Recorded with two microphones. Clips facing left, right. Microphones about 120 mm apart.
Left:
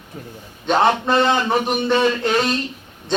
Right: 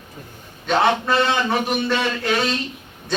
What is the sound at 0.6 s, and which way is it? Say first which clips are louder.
A man's voice: left 2 dB; 30° left (ahead or behind).